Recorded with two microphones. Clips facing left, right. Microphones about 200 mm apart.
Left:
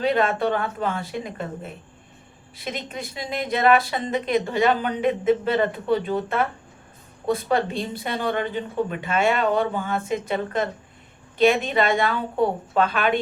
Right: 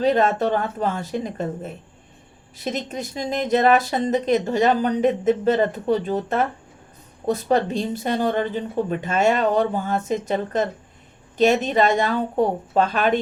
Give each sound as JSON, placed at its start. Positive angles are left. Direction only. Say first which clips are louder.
{"t": 0.0, "sound": "speech", "louder": "right 3 dB", "side_deg": -40}